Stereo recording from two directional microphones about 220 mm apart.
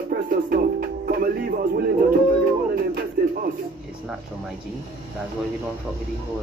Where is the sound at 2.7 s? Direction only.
40° right (ahead or behind).